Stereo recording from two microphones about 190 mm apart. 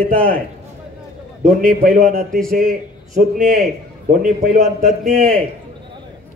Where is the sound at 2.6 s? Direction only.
50° right (ahead or behind).